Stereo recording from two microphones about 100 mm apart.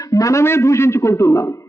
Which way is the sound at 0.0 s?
35° left (ahead or behind).